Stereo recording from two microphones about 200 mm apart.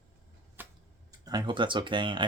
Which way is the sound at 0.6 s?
10° right (ahead or behind).